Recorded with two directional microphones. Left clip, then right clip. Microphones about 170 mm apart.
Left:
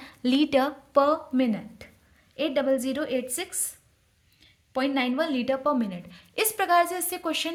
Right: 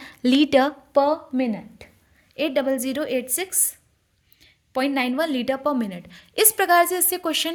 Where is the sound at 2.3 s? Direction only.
40° right (ahead or behind).